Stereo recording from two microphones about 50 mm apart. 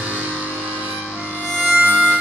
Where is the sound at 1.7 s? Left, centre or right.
Right.